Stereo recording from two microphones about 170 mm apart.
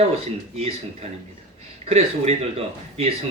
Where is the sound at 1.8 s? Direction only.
40° right (ahead or behind).